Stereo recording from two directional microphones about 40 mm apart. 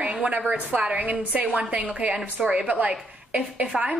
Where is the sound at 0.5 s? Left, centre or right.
Right.